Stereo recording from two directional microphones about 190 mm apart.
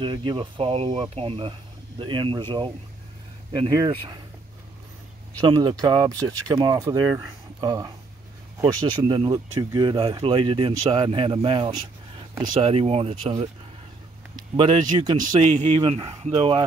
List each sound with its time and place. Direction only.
0.0 s speech: 25° right (ahead or behind)
3.5 s speech: 25° right (ahead or behind)
5.4 s speech: 25° right (ahead or behind)
15.4 s speech: 35° right (ahead or behind)